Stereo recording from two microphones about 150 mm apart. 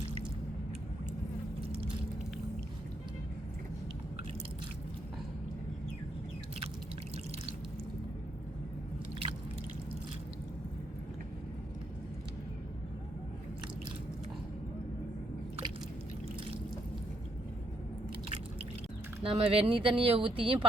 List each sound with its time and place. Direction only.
19.2 s speech: 40° right (ahead or behind)